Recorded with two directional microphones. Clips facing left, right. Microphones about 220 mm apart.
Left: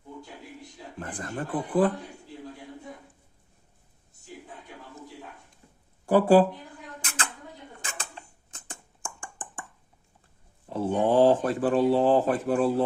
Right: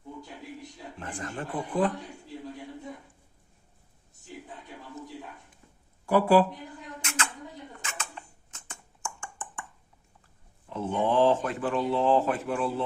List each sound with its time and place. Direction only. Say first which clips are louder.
0.9 s speech: left 3 dB; 35° left (ahead or behind)
6.1 s speech: left 3 dB; 30° left (ahead or behind)
7.8 s dishes: left 2 dB; 35° left (ahead or behind)
8.4 s a sound: left 3 dB; 35° left (ahead or behind)
10.7 s speech: left 3 dB; 35° left (ahead or behind)